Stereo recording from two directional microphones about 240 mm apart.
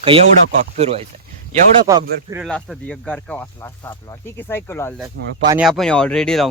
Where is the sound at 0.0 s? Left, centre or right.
Right.